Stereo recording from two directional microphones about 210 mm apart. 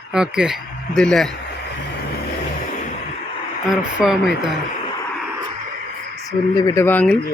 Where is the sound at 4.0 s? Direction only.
Centre (ahead or behind).